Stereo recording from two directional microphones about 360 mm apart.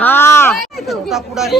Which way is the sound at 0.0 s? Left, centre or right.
Centre.